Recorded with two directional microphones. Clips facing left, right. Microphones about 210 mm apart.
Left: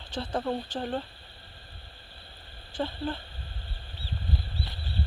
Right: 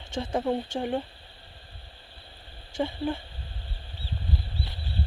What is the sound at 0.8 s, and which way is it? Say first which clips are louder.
Speech: right 3 dB; 10° right (ahead or behind).